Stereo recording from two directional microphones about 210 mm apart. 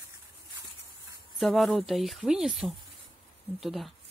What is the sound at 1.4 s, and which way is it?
Speech, centre (ahead or behind).